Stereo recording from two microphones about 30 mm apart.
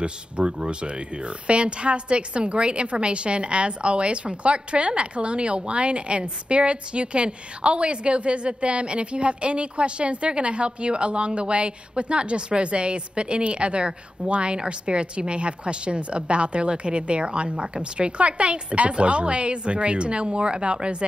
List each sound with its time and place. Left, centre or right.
0.0 s a woman's voice: right